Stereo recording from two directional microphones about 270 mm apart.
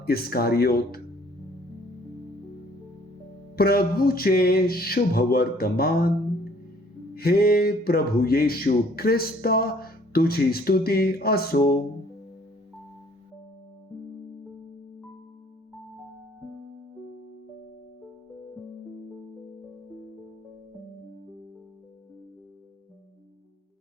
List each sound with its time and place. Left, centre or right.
0.0 s speech: left
3.5 s speech: left
7.2 s speech: left